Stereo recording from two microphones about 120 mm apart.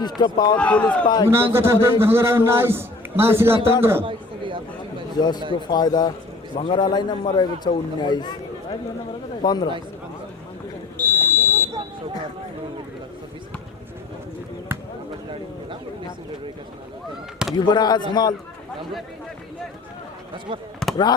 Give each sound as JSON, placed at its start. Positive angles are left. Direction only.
{"t": 0.2, "sound": "a man's voice", "side_deg": 35}
{"t": 0.5, "sound": "a man's voice", "side_deg": 10}
{"t": 1.0, "sound": "a man's voice", "side_deg": 35}
{"t": 1.3, "sound": "a man's voice", "side_deg": -20}
{"t": 4.0, "sound": "chatter", "side_deg": -45}
{"t": 5.1, "sound": "a man's voice", "side_deg": 35}
{"t": 9.4, "sound": "a man's voice", "side_deg": 35}
{"t": 10.9, "sound": "buzzer", "side_deg": 15}
{"t": 17.5, "sound": "a man's voice", "side_deg": 40}
{"t": 20.8, "sound": "basketball bounce", "side_deg": 5}